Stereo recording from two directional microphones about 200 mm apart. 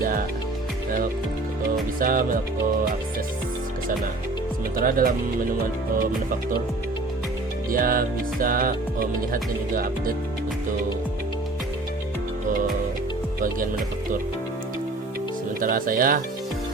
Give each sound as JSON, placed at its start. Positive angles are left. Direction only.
{"t": 2.0, "sound": "music", "side_deg": -45}
{"t": 4.8, "sound": "music", "side_deg": -45}
{"t": 7.7, "sound": "music", "side_deg": -45}
{"t": 15.6, "sound": "music", "side_deg": -45}